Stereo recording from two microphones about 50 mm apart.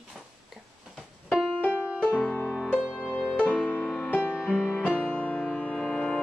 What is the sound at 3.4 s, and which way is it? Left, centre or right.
Music, left.